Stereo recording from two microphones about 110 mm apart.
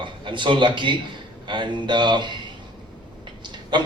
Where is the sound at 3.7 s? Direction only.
40° right (ahead or behind).